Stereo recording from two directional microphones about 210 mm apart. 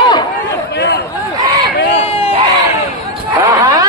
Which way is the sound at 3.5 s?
15° right (ahead or behind).